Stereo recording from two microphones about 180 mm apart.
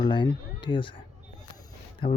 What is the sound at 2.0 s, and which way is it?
Speech, 30° left (ahead or behind).